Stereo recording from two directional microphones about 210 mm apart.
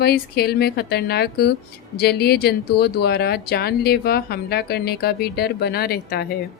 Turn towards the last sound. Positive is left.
turn(degrees=50)  # may be behind; listen again after turning